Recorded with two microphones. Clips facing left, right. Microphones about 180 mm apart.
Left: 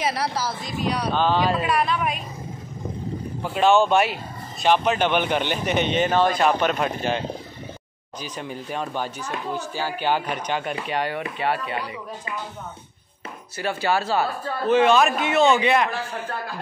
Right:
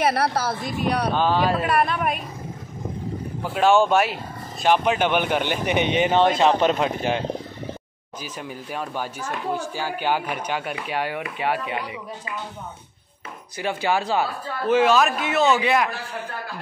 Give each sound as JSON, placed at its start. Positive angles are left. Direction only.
{"t": 0.0, "sound": "speech", "side_deg": -60}
{"t": 1.1, "sound": "speech", "side_deg": -10}
{"t": 1.6, "sound": "a woman's voice", "side_deg": -55}
{"t": 3.5, "sound": "a man's voice", "side_deg": -10}
{"t": 8.2, "sound": "speech", "side_deg": -5}
{"t": 13.6, "sound": "speech", "side_deg": -15}
{"t": 14.7, "sound": "a man's voice", "side_deg": -5}